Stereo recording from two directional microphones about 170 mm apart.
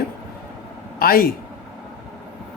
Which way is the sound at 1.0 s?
60° left (ahead or behind).